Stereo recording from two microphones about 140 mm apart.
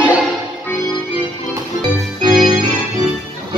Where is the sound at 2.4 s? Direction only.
30° right (ahead or behind).